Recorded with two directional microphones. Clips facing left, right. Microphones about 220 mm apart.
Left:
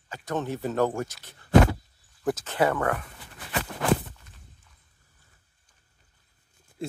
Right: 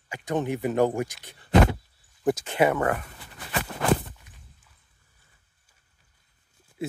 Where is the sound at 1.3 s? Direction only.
20° right (ahead or behind).